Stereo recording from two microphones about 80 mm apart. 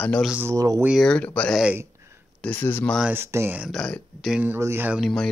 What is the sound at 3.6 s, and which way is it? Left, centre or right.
Speech, centre.